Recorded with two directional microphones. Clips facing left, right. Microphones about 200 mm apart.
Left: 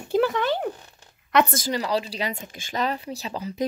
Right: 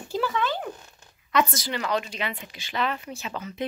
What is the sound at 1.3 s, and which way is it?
Speech, 50° left (ahead or behind).